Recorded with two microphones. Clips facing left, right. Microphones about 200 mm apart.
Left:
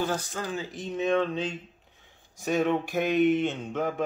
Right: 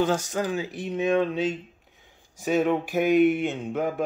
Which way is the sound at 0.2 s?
15° right (ahead or behind).